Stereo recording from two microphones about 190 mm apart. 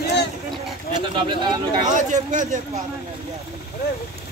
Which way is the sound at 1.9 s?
40° right (ahead or behind).